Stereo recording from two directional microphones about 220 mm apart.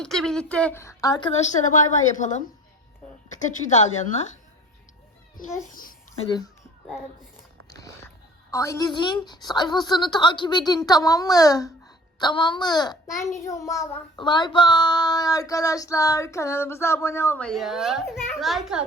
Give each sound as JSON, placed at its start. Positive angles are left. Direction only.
{"t": 0.0, "sound": "a woman's voice", "side_deg": 0}
{"t": 1.6, "sound": "a woman's voice", "side_deg": 35}
{"t": 5.7, "sound": "babbling", "side_deg": 40}
{"t": 7.7, "sound": "a woman's voice", "side_deg": 15}
{"t": 13.3, "sound": "child singing", "side_deg": 15}